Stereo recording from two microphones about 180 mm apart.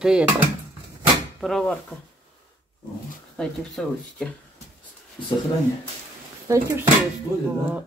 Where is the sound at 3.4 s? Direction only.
5° left (ahead or behind).